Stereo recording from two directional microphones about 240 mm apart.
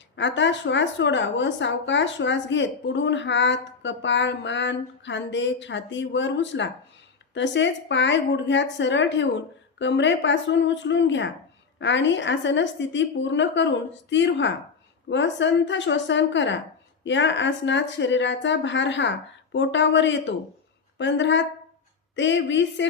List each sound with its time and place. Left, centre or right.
0.2 s speech: left